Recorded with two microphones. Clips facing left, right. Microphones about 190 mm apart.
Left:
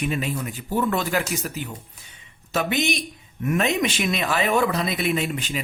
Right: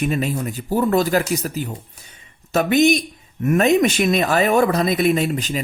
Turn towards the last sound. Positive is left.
turn(degrees=-40)  # may be behind; listen again after turning